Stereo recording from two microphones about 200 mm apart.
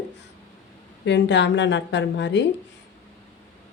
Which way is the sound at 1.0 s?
60° left (ahead or behind).